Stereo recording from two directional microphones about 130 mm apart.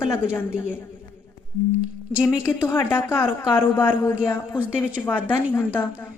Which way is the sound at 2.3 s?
20° left (ahead or behind).